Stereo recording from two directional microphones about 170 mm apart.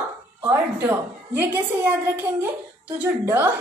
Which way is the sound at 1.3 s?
10° right (ahead or behind).